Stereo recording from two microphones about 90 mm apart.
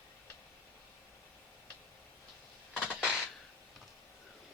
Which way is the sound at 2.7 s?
10° right (ahead or behind).